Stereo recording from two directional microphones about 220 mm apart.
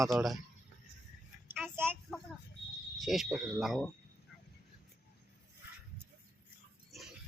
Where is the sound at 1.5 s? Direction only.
10° right (ahead or behind).